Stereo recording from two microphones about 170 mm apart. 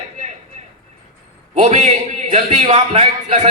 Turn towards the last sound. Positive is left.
turn(degrees=-35)  # may be behind; listen again after turning